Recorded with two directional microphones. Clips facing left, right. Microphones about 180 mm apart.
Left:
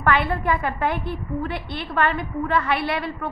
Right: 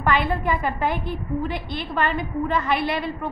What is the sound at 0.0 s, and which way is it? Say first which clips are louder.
A woman's voice: even; 15° right (ahead or behind).